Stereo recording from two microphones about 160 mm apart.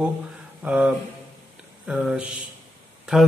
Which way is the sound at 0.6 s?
5° right (ahead or behind).